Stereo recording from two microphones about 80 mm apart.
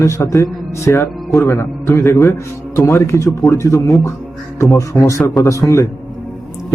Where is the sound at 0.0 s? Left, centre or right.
Left.